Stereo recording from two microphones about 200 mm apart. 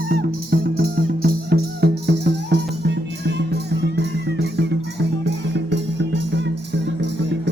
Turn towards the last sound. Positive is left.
turn(degrees=-60)  # may be behind; listen again after turning